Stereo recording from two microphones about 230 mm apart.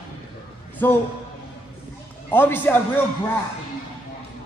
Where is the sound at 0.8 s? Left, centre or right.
Centre.